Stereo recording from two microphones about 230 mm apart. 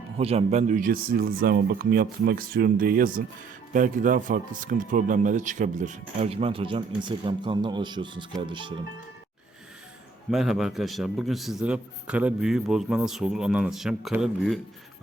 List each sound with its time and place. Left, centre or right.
0.2 s speech: right
10.3 s a man's voice: centre